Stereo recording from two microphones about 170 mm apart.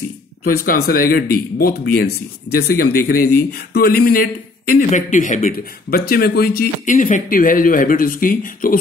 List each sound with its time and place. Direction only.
0.4 s a man's voice: 60° left (ahead or behind)